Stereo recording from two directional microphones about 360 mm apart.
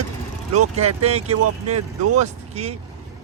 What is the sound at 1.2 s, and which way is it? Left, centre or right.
Speech, right.